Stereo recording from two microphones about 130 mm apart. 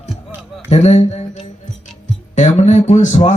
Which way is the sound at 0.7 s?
55° left (ahead or behind).